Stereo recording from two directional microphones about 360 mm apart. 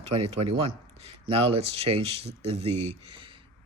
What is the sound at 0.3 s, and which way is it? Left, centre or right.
Speech, centre.